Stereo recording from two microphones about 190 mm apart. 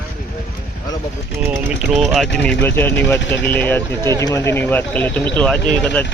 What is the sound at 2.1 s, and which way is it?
Speech, 5° left (ahead or behind).